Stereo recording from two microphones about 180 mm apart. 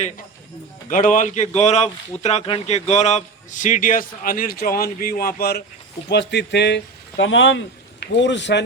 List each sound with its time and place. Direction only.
0.9 s speech: 45° left (ahead or behind)
6.1 s speech: 70° left (ahead or behind)